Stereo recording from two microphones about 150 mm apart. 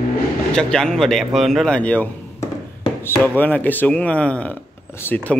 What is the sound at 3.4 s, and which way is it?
Speech, 10° left (ahead or behind).